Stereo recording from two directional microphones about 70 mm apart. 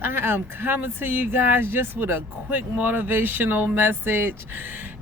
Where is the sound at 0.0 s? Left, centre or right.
Right.